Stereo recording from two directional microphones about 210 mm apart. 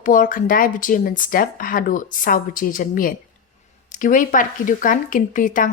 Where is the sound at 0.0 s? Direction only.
40° left (ahead or behind).